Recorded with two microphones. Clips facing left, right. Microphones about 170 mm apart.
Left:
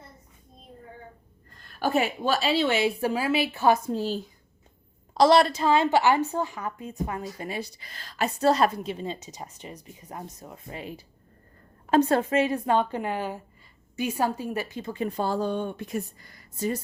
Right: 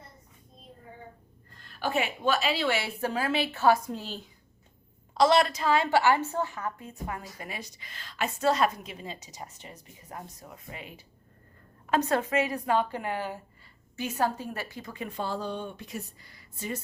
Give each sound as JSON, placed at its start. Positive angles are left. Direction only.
{"t": 1.8, "sound": "a woman's voice", "side_deg": 40}
{"t": 3.8, "sound": "a woman's voice", "side_deg": 35}